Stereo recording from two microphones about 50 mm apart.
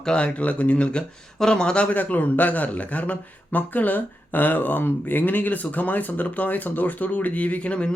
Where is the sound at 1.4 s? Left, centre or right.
Centre.